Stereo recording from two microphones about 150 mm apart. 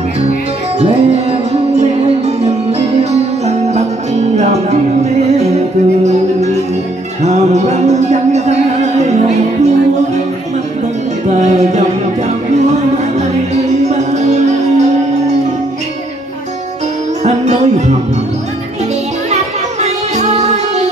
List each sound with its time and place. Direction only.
0.2 s music: 45° right (ahead or behind)
7.2 s music: 50° right (ahead or behind)
11.3 s music: 50° right (ahead or behind)
13.8 s music: 50° right (ahead or behind)
17.2 s music: 50° right (ahead or behind)
19.3 s music: 50° right (ahead or behind)